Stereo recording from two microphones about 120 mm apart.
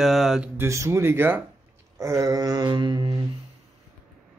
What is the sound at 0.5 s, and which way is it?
Speech, 20° right (ahead or behind).